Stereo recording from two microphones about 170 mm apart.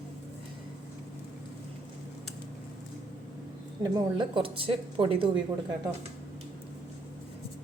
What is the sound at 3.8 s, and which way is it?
A woman's voice, 25° right (ahead or behind).